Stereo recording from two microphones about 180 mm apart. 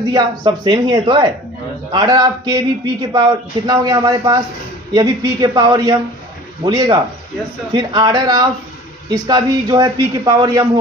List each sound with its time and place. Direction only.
0.1 s a man's voice: 20° right (ahead or behind)